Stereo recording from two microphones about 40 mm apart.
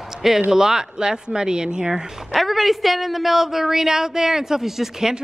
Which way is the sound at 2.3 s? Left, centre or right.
Centre.